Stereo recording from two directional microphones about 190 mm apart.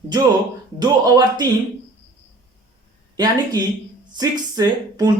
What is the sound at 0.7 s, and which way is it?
Speech, 20° right (ahead or behind).